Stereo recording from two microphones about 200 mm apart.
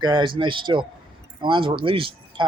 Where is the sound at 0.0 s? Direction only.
25° right (ahead or behind).